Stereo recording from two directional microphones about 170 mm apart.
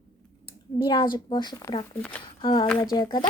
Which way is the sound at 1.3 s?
25° left (ahead or behind).